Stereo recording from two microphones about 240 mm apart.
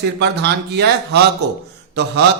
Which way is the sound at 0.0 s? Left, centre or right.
Right.